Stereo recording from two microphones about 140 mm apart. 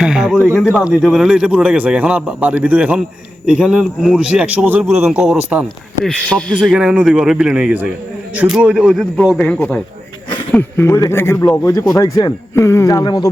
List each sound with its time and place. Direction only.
0.0 s speech: 5° right (ahead or behind)
0.5 s a man's voice: 10° left (ahead or behind)
0.8 s a man's voice: 5° right (ahead or behind)
6.2 s a man's voice: 5° left (ahead or behind); by 13.2 s 30° left (ahead or behind)